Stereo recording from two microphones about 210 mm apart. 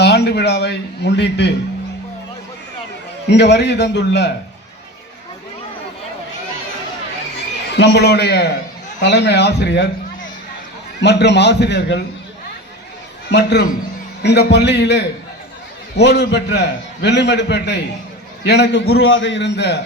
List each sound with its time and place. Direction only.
0.0 s a man's voice: 50° left (ahead or behind)
3.2 s a man's voice: 55° left (ahead or behind)
7.8 s a man's voice: 50° left (ahead or behind)
11.0 s a man's voice: 55° left (ahead or behind)
13.3 s a man's voice: 55° left (ahead or behind)
18.9 s a man's voice: 75° left (ahead or behind); by 19.8 s 55° left (ahead or behind)